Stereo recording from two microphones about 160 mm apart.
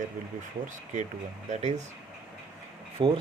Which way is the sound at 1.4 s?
45° right (ahead or behind).